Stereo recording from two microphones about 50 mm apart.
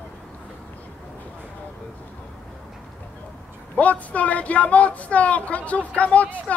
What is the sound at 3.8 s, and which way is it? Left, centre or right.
Speech, left.